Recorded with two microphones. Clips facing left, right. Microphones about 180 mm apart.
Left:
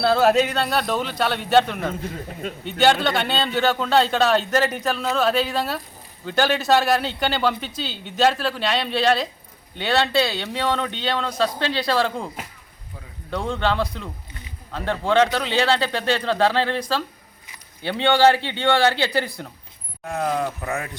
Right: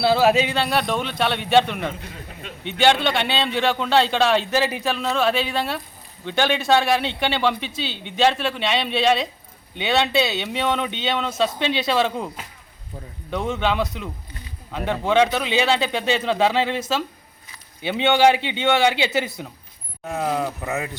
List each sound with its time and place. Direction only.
0.0 s a man's voice: centre (ahead or behind)
10.5 s speech: 20° right (ahead or behind)
13.3 s speech: 20° right (ahead or behind)
20.1 s speech: 5° right (ahead or behind)